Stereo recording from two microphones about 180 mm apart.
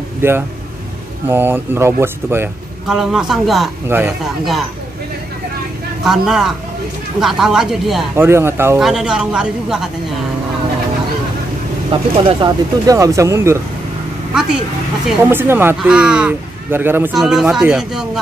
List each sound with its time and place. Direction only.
0.2 s speech: 10° right (ahead or behind)
3.0 s speech: centre (ahead or behind)
3.9 s speech: 10° right (ahead or behind)
6.0 s speech: 5° right (ahead or behind)
8.2 s speech: 15° right (ahead or behind)
8.7 s speech: 5° right (ahead or behind)
11.9 s speech: 25° right (ahead or behind)
15.2 s speech: 10° right (ahead or behind)